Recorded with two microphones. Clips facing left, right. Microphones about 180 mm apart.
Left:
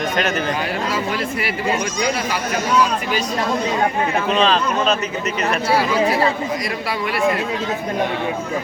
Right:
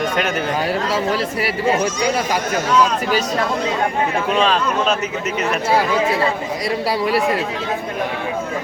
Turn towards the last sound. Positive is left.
turn(degrees=-35)  # may be behind; listen again after turning